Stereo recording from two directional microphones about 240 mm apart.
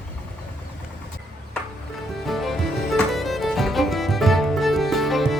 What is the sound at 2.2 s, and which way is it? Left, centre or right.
Music, centre.